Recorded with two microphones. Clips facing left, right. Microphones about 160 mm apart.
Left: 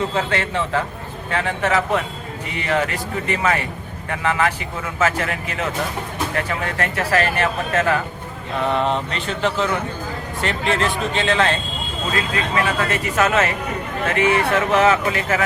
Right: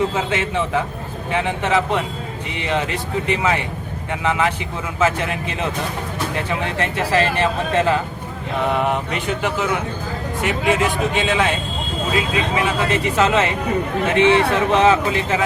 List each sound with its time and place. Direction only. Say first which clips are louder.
0.2 s speech: right 1 dB; 15° right (ahead or behind)
8.6 s speech: even; 15° right (ahead or behind)